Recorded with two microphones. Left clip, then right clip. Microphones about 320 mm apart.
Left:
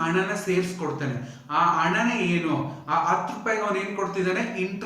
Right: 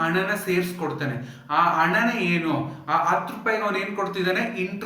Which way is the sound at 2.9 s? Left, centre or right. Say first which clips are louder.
Right 1 dB; centre.